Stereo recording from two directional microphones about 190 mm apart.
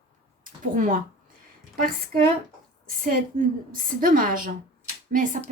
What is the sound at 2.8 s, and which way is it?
Speech, 45° right (ahead or behind).